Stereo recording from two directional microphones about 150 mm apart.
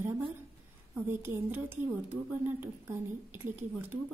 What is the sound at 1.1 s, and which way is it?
A woman's voice, 15° right (ahead or behind).